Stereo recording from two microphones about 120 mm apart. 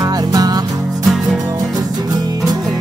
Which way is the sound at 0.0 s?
30° right (ahead or behind).